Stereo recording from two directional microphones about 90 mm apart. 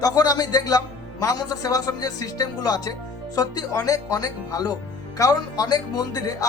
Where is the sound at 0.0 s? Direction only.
45° left (ahead or behind).